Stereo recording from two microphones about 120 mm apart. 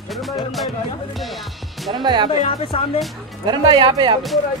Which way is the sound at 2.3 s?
55° left (ahead or behind).